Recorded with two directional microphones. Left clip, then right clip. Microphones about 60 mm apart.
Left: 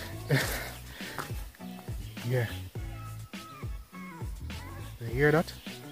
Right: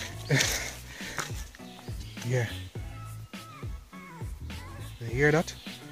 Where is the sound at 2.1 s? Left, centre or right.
Centre.